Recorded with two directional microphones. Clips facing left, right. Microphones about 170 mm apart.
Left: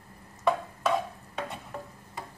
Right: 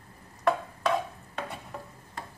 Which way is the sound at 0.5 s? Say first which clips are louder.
Even; 5° left (ahead or behind).